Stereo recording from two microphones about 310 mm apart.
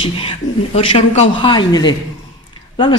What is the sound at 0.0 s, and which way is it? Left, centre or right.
A man's voice, centre.